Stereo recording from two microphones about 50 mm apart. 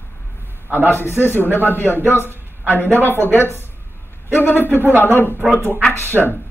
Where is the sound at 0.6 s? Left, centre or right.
Right.